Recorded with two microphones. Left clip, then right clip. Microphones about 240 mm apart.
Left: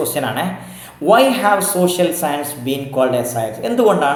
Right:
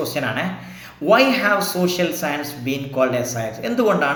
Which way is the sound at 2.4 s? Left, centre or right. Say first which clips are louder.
Left 3 dB; right.